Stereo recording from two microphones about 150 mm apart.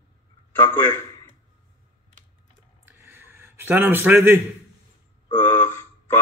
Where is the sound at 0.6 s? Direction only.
15° left (ahead or behind).